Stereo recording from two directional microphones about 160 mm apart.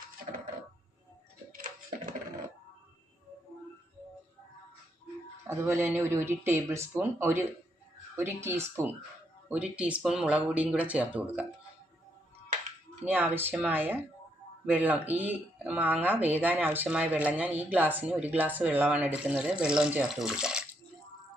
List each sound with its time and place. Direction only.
5.5 s speech: 15° right (ahead or behind)
13.1 s speech: 10° right (ahead or behind)